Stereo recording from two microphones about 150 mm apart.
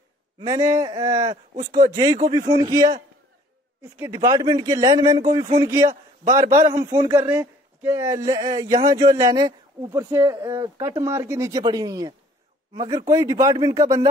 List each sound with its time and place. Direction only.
0.5 s a man's voice: 20° right (ahead or behind)